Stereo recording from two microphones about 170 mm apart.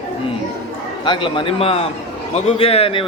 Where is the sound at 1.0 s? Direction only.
30° left (ahead or behind).